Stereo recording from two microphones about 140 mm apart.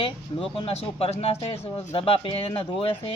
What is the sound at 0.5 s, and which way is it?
Speech, 40° left (ahead or behind).